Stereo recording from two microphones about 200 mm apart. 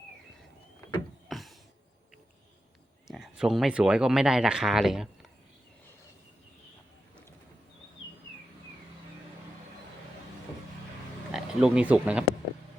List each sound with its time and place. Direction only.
1.3 s a sound: centre (ahead or behind)
3.1 s speech: 5° right (ahead or behind)
11.3 s speech: 5° right (ahead or behind)